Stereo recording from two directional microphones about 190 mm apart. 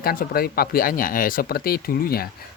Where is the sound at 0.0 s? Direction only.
50° left (ahead or behind).